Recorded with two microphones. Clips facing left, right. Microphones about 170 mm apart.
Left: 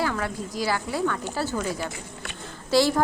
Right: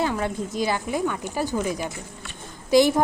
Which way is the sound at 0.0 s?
20° right (ahead or behind).